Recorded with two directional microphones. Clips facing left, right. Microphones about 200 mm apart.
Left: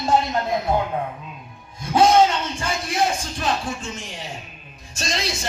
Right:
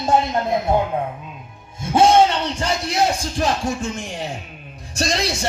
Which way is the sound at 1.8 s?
25° right (ahead or behind).